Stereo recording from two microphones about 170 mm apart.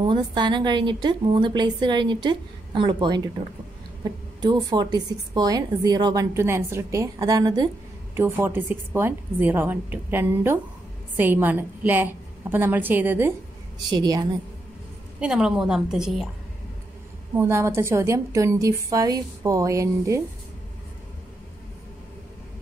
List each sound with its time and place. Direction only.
0.0 s a woman's voice: 30° right (ahead or behind)
4.4 s a woman's voice: 25° right (ahead or behind)
13.8 s a woman's voice: 20° right (ahead or behind)
15.1 s a woman's voice: 5° right (ahead or behind)
17.4 s a woman's voice: 15° right (ahead or behind)